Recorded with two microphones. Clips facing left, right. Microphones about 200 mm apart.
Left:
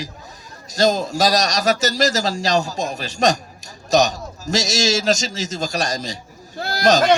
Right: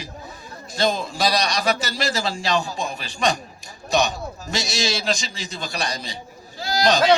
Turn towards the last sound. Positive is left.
turn(degrees=45)  # may be behind; listen again after turning